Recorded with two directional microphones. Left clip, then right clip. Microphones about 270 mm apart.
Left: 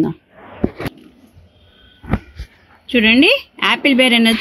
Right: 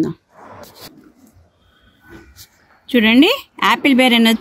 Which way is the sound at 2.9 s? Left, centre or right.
Right.